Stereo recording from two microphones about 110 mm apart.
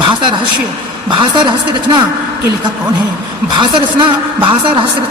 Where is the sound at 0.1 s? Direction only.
45° right (ahead or behind).